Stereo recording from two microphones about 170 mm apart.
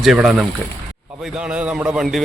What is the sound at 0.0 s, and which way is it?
Speech, 5° right (ahead or behind).